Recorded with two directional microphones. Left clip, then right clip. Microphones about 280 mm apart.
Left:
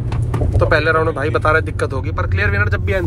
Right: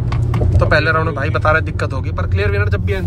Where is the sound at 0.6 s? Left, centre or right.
Centre.